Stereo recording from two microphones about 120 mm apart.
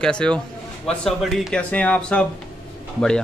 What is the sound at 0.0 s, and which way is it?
A man's voice, 5° left (ahead or behind).